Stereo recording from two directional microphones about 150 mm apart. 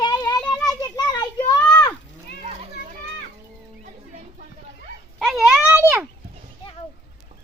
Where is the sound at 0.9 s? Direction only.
25° left (ahead or behind).